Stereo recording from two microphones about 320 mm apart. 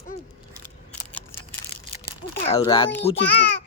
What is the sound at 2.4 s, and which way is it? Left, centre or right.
Speech, centre.